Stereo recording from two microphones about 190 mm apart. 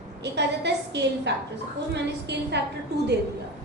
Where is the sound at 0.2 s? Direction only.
60° right (ahead or behind).